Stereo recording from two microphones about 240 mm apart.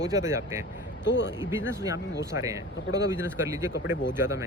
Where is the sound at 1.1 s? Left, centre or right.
Left.